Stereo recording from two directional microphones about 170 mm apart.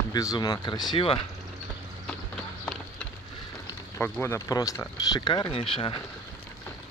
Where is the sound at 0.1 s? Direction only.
20° left (ahead or behind).